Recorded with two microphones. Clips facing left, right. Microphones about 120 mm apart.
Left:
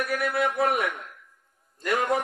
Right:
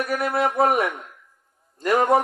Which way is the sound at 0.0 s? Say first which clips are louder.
Right 3 dB; 40° right (ahead or behind).